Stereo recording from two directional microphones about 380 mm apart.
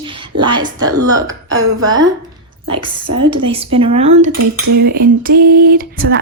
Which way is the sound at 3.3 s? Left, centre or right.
Centre.